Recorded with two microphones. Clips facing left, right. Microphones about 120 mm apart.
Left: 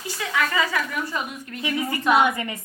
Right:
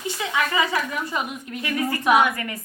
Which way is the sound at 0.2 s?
20° right (ahead or behind).